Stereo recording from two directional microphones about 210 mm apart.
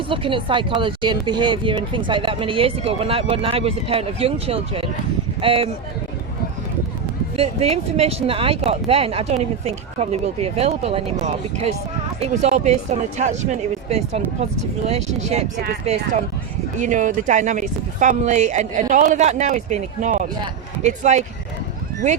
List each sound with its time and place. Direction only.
0.1 s speech: 25° right (ahead or behind)
7.3 s speech: 30° right (ahead or behind)